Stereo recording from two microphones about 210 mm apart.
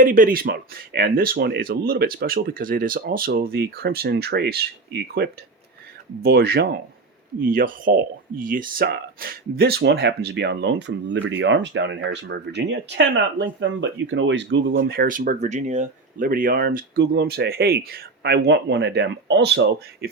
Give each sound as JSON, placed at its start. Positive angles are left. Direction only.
{"t": 0.0, "sound": "speech", "side_deg": -40}